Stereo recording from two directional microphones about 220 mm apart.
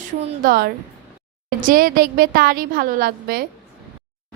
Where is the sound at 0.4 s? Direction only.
45° right (ahead or behind).